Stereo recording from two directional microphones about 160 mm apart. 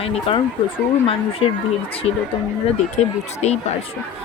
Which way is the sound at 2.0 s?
5° right (ahead or behind).